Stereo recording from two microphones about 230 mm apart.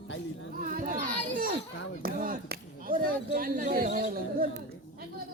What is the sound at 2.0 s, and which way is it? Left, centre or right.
Speech, right.